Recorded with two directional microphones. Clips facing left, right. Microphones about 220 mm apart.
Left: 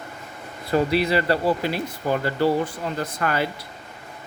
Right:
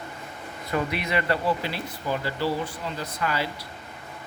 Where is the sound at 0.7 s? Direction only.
35° left (ahead or behind); by 3.5 s 55° left (ahead or behind).